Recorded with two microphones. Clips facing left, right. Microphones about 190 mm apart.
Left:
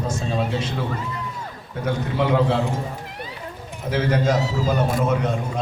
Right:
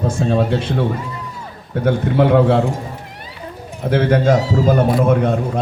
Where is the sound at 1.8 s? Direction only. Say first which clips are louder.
Right 7 dB; 55° right (ahead or behind).